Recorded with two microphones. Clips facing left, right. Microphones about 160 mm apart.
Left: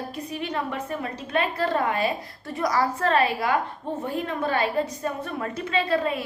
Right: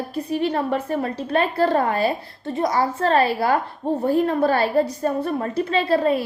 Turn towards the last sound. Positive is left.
turn(degrees=-35)  # may be behind; listen again after turning